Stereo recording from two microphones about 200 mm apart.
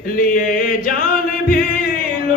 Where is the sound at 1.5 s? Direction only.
45° left (ahead or behind).